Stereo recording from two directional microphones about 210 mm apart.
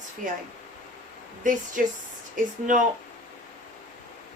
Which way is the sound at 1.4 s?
40° right (ahead or behind).